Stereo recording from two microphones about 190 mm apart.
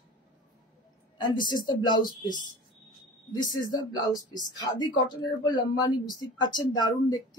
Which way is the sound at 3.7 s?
20° left (ahead or behind).